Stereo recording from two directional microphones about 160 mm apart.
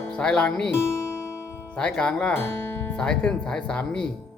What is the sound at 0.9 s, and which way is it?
Music, 15° left (ahead or behind).